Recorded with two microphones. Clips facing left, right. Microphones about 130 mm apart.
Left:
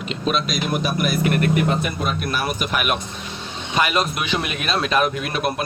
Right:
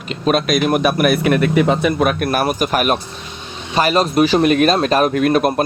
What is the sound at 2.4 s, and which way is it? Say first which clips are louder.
A man's voice: right 6 dB; 40° right (ahead or behind).